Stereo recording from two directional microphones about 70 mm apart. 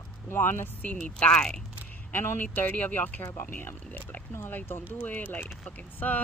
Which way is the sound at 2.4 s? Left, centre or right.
Left.